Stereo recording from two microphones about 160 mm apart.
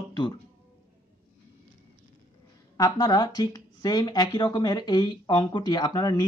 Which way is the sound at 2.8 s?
25° left (ahead or behind).